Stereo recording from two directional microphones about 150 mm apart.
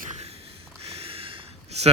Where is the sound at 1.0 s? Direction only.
40° right (ahead or behind).